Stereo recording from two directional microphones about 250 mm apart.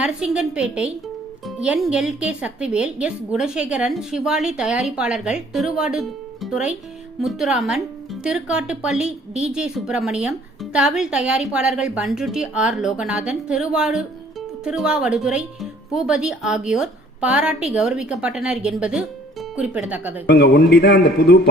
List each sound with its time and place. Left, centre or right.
0.0 s a woman's voice: centre
20.2 s a man's voice: left